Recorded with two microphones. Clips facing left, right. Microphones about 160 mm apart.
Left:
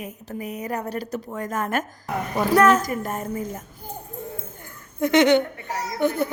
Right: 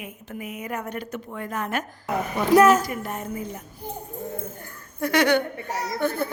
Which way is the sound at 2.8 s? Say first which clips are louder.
Left 3 dB; 45° left (ahead or behind).